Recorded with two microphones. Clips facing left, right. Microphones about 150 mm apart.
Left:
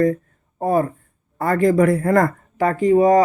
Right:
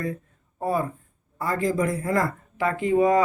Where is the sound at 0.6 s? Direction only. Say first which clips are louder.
Left 7 dB; 45° left (ahead or behind).